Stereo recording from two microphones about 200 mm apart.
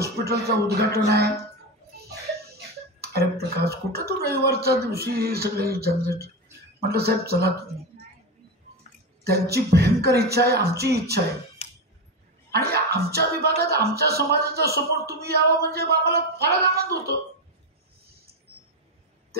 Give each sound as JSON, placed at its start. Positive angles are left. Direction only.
{"t": 0.0, "sound": "speech", "side_deg": -55}
{"t": 3.0, "sound": "speech", "side_deg": -50}
{"t": 9.2, "sound": "speech", "side_deg": -55}
{"t": 12.4, "sound": "speech", "side_deg": -50}